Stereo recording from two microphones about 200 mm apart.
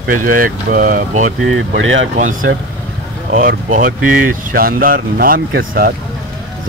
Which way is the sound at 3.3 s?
45° right (ahead or behind).